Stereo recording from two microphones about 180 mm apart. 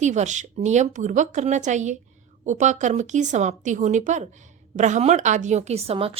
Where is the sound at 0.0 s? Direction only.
40° right (ahead or behind).